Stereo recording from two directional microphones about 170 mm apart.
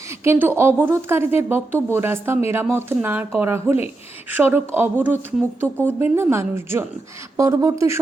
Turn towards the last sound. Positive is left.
turn(degrees=-20)  # may be behind; listen again after turning